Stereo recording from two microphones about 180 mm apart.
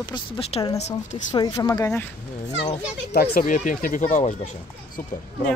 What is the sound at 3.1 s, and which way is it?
A child's voice, 55° left (ahead or behind).